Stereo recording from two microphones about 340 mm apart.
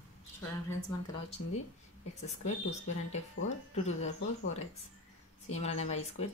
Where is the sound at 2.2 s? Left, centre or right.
Centre.